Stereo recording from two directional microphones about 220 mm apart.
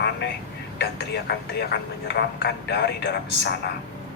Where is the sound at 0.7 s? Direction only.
50° left (ahead or behind).